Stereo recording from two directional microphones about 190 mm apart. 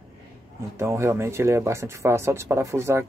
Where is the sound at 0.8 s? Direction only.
15° right (ahead or behind).